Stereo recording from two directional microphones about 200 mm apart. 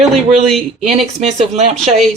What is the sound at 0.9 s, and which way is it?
Speech, 35° right (ahead or behind).